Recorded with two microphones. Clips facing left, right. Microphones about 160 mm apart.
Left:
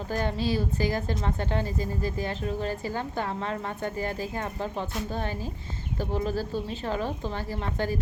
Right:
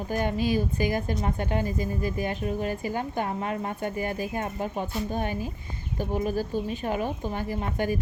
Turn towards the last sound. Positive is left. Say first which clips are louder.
# right 2 dB
turn(degrees=-15)  # may be behind; listen again after turning